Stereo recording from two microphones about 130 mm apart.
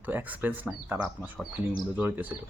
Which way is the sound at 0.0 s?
15° right (ahead or behind).